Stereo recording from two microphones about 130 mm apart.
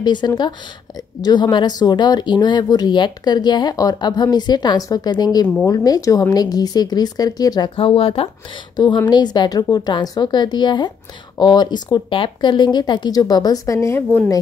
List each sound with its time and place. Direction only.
0.0 s speech: 35° left (ahead or behind)
7.7 s speech: 45° left (ahead or behind)
8.7 s speech: 35° left (ahead or behind)